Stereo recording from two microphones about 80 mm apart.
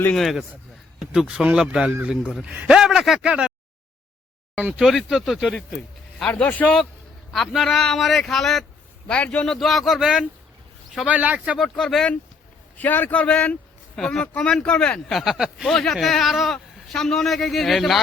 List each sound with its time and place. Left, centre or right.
0.1 s a man's voice: centre
4.8 s a man's voice: centre
6.4 s speech: centre
7.3 s a man's voice: centre
9.6 s a man's voice: centre
11.0 s a man's voice: centre
11.5 s a man's voice: centre
12.7 s speech: left
15.2 s a man's voice: centre